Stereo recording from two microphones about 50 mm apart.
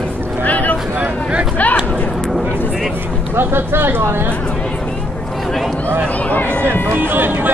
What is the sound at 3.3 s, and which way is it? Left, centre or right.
Speech, right.